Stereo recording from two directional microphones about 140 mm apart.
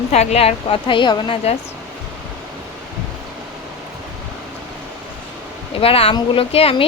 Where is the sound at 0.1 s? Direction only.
50° left (ahead or behind); by 1.4 s 35° left (ahead or behind).